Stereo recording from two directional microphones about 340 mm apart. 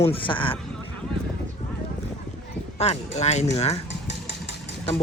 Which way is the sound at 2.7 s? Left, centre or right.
Centre.